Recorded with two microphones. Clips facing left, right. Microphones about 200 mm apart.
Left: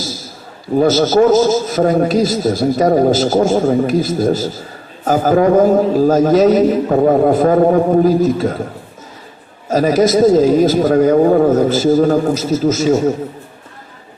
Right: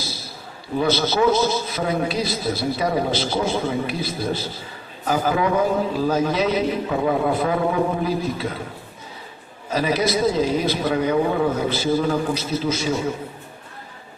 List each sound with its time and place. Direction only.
0.0 s a sound: 45° left (ahead or behind)
0.8 s a man's voice: 45° left (ahead or behind)
9.6 s a man's voice: 45° left (ahead or behind)